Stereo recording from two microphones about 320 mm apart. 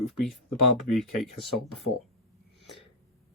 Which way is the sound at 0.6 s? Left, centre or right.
Left.